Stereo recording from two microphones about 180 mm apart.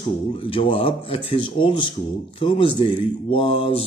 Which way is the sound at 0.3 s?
30° left (ahead or behind).